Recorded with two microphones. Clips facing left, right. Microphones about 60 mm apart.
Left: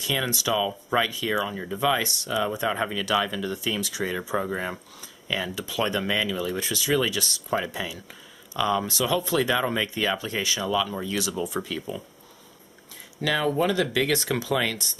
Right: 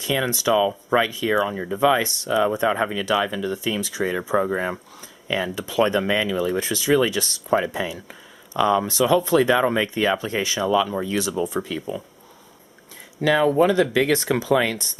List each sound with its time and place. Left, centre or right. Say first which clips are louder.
0.0 s speech: right 5 dB; right
11.6 s speech: right 4 dB; centre
13.2 s speech: right 6 dB; right